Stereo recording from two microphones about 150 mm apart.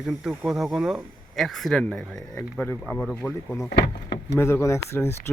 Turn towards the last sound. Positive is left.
turn(degrees=15)  # may be behind; listen again after turning